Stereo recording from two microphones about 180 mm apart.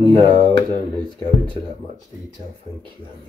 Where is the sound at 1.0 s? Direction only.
25° left (ahead or behind).